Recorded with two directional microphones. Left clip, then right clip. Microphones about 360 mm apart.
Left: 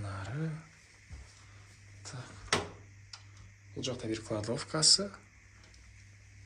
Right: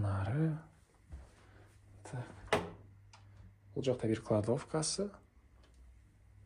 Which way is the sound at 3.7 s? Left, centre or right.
Centre.